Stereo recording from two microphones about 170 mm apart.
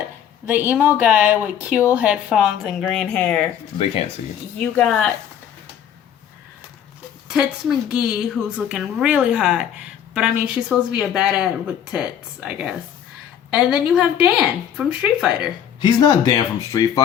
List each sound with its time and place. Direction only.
0.4 s a woman's voice: 10° right (ahead or behind); by 3.4 s 5° left (ahead or behind)
4.6 s speech: 5° left (ahead or behind)
7.3 s a woman's voice: 5° right (ahead or behind)
15.8 s speech: 25° left (ahead or behind)